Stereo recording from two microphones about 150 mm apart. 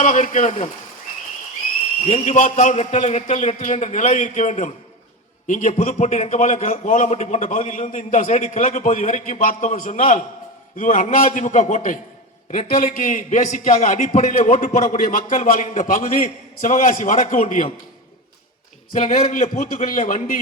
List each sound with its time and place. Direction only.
0.0 s a man's voice: 55° left (ahead or behind)
2.0 s a man's voice: 50° left (ahead or behind)
12.7 s a man's voice: 65° left (ahead or behind)
18.9 s a man's voice: 60° left (ahead or behind)